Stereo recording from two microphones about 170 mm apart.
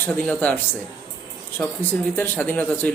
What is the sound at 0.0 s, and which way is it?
Speech, 10° left (ahead or behind).